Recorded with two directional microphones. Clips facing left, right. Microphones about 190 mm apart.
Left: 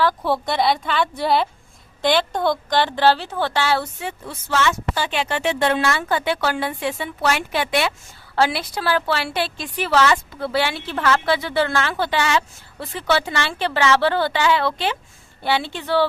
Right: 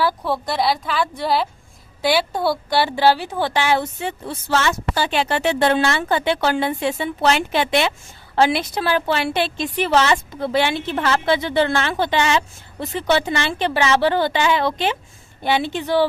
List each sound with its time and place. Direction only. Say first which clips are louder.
0.2 s a woman's voice: left 1 dB; centre (ahead or behind); by 3.8 s 15° right (ahead or behind)
4.0 s a woman's voice: right 4 dB; 30° right (ahead or behind); by 16.0 s 15° right (ahead or behind)